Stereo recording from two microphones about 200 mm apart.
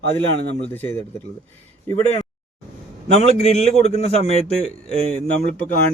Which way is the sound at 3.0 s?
30° left (ahead or behind).